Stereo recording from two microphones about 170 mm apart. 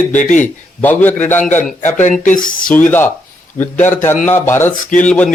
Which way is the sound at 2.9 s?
15° left (ahead or behind).